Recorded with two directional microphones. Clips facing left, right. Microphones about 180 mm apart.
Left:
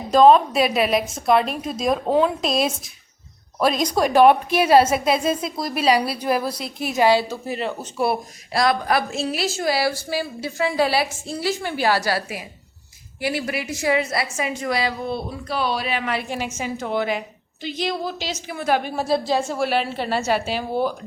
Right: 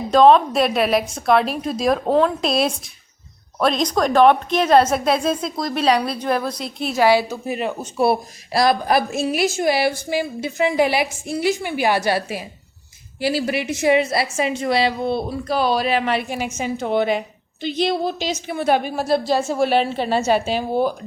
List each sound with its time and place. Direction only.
0.1 s a woman's voice: centre (ahead or behind)
7.1 s a woman's voice: 15° right (ahead or behind)
7.9 s a woman's voice: 30° right (ahead or behind)
16.3 s a woman's voice: 15° right (ahead or behind)
18.9 s a woman's voice: centre (ahead or behind)
19.5 s a woman's voice: 20° right (ahead or behind)